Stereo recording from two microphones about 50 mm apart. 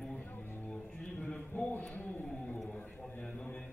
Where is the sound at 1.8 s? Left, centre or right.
Left.